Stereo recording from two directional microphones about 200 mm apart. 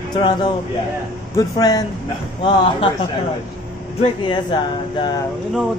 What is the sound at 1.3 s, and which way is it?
Speech, 20° left (ahead or behind).